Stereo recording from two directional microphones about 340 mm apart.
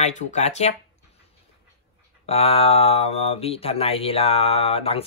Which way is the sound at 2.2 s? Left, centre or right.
Centre.